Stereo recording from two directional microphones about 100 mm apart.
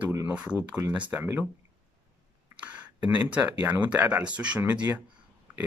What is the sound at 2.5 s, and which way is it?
Speech, 15° right (ahead or behind).